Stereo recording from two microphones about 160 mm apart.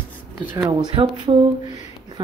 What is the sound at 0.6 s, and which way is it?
Speech, 30° right (ahead or behind).